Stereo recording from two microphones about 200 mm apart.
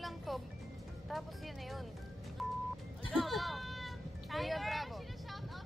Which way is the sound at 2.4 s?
Centre (ahead or behind).